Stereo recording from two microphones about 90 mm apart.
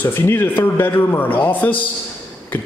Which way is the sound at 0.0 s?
25° left (ahead or behind).